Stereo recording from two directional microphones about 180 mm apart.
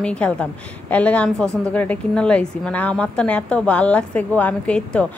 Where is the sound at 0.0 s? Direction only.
5° left (ahead or behind).